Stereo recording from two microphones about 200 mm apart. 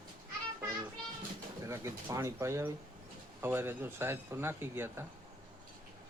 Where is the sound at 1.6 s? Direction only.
15° right (ahead or behind).